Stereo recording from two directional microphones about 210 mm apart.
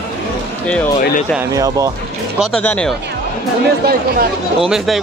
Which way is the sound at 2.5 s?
5° left (ahead or behind).